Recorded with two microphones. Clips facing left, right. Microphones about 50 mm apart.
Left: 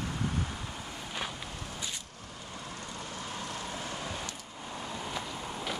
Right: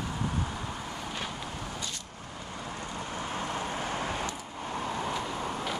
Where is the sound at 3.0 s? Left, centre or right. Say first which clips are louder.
Right 6 dB; right.